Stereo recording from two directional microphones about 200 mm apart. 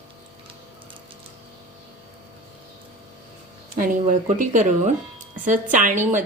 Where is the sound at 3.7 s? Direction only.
45° right (ahead or behind).